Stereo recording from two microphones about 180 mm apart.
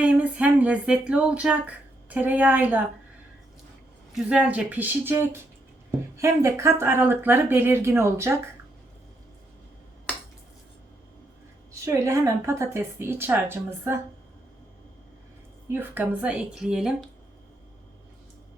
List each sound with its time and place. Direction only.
0.0 s speech: 5° right (ahead or behind)
4.1 s speech: 5° right (ahead or behind)
11.7 s speech: 15° right (ahead or behind)
15.7 s speech: 10° right (ahead or behind)